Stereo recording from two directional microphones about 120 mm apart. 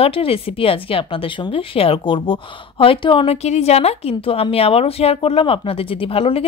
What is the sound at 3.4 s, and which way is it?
A woman's voice, 65° left (ahead or behind).